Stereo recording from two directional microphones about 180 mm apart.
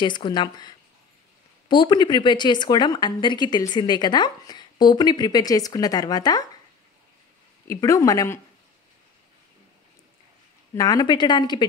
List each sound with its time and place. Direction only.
0.0 s speech: 25° left (ahead or behind)
7.6 s speech: 15° left (ahead or behind)
10.7 s speech: 20° left (ahead or behind)